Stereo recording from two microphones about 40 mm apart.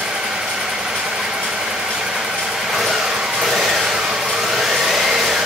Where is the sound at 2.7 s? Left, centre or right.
Centre.